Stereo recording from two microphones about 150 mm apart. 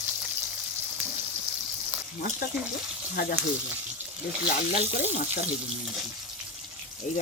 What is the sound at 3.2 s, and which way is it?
Speech, 75° left (ahead or behind).